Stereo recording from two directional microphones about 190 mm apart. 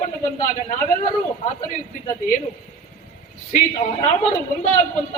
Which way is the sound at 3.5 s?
40° left (ahead or behind).